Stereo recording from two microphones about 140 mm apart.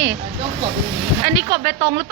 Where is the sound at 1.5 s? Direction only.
45° right (ahead or behind).